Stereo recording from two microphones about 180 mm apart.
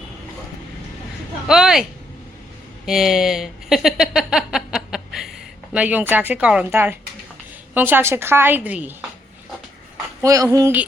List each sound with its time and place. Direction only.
1.5 s a sound: 5° right (ahead or behind)
2.8 s a woman's voice: centre (ahead or behind)
10.2 s a woman's voice: 20° right (ahead or behind)